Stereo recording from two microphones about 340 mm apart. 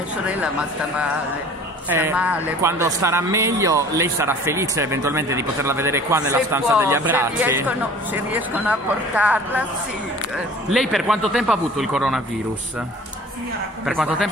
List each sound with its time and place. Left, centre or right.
0.4 s a man's voice: centre
10.7 s a man's voice: centre
13.8 s a man's voice: centre